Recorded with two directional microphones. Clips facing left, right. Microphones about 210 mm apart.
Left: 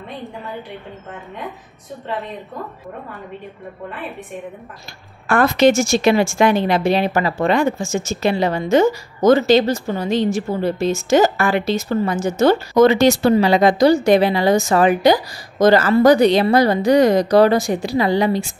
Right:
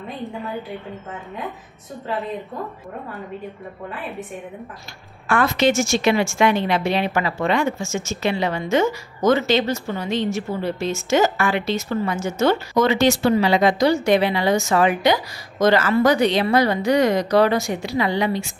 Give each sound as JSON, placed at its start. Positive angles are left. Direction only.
{"t": 5.3, "sound": "speech", "side_deg": 40}